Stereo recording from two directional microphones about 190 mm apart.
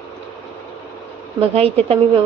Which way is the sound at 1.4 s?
30° right (ahead or behind).